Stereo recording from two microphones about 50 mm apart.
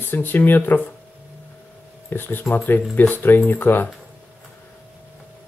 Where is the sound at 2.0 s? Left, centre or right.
Left.